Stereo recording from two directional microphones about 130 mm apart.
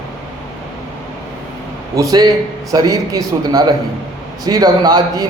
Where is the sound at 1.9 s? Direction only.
25° right (ahead or behind).